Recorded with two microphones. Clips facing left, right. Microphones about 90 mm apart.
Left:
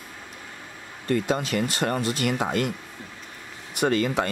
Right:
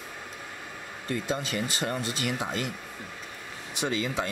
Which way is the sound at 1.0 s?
60° left (ahead or behind).